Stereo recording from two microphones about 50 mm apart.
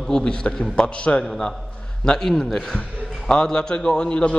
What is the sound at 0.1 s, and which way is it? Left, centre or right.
A man's voice, centre.